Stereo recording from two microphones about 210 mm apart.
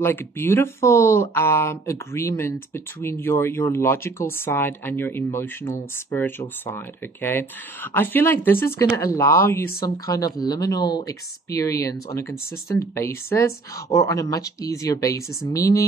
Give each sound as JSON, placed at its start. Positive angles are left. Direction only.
{"t": 0.0, "sound": "speech", "side_deg": 10}